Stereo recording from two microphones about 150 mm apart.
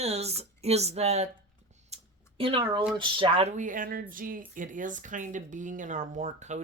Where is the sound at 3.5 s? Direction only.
60° right (ahead or behind).